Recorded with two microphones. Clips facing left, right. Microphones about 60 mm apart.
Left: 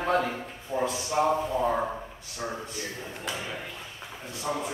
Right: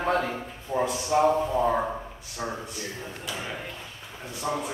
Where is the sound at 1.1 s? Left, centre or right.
Centre.